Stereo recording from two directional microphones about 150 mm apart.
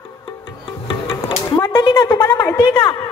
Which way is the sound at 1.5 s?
30° left (ahead or behind).